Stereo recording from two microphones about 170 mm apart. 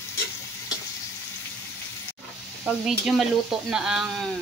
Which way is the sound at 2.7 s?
Centre (ahead or behind).